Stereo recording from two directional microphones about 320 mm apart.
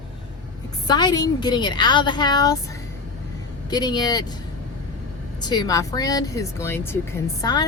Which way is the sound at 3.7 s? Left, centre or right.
Centre.